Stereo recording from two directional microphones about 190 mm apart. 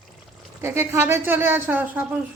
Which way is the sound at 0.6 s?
15° right (ahead or behind).